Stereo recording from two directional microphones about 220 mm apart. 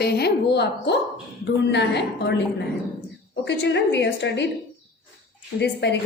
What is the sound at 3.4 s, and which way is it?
A woman's voice, 50° left (ahead or behind).